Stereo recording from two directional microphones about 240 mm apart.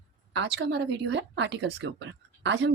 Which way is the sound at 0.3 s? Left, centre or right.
Right.